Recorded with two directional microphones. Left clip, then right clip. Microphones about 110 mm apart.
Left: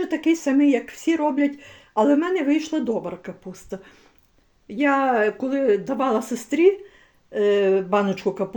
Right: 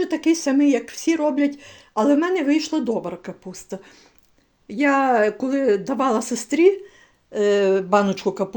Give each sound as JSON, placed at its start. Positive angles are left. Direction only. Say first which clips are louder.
{"t": 0.1, "sound": "speech", "louder": "right 1 dB", "side_deg": -15}